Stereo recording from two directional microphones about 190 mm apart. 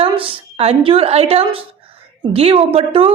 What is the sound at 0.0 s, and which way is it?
A woman's voice, 30° right (ahead or behind).